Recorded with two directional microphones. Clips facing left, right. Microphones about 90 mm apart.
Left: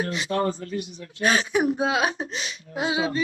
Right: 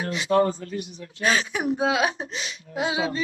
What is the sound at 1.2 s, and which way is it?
Speech, 40° left (ahead or behind).